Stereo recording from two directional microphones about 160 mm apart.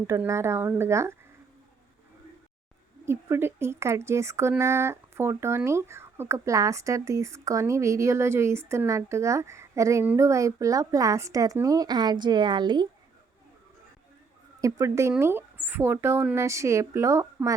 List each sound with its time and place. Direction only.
0.1 s speech: 20° right (ahead or behind)
3.1 s speech: 15° right (ahead or behind)
14.6 s speech: 20° right (ahead or behind)